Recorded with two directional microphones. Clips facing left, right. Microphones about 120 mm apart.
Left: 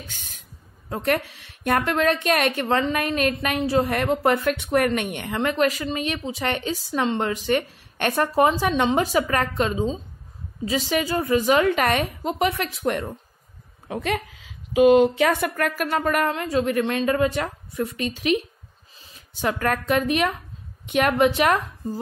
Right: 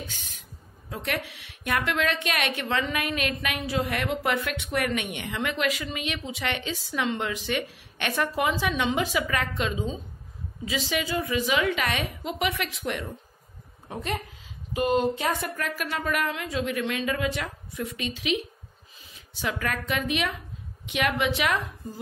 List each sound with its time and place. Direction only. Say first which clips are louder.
0.1 s a sound: even; 45° left (ahead or behind)
0.8 s a woman's voice: left 8 dB; 45° left (ahead or behind)
13.8 s a woman's voice: left 6 dB; 90° left; by 21.5 s 45° left (ahead or behind)